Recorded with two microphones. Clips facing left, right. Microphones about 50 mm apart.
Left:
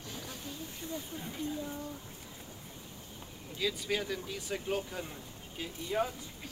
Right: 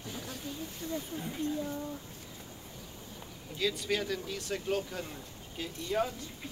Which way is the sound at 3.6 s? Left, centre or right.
Centre.